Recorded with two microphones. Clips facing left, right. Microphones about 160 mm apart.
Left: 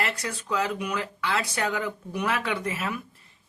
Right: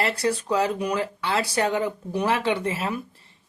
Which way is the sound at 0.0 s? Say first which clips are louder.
Right 7 dB; 35° right (ahead or behind).